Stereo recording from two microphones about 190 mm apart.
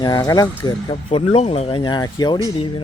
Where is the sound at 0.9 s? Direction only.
30° left (ahead or behind).